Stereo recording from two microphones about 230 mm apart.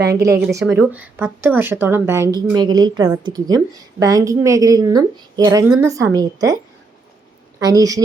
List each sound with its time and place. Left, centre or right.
0.0 s speech: centre
7.6 s speech: centre